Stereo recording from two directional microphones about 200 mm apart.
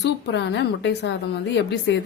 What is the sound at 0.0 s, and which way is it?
A woman's voice, 60° left (ahead or behind).